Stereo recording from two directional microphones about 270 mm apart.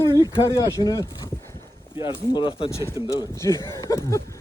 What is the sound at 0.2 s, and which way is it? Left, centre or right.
Speech, centre.